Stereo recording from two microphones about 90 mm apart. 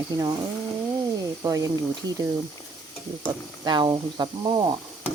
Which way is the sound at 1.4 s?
40° right (ahead or behind).